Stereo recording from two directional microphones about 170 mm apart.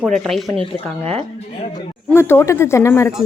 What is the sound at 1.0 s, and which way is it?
Speech, 35° right (ahead or behind).